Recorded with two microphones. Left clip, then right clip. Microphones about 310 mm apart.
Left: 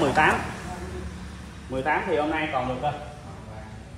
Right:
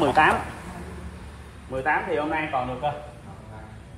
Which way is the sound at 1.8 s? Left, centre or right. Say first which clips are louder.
Even; centre.